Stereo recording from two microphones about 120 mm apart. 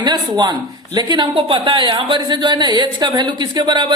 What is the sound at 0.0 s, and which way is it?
Speech, 35° right (ahead or behind).